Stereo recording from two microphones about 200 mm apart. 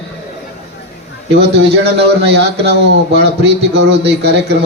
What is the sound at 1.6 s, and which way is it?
A man's voice, 55° right (ahead or behind).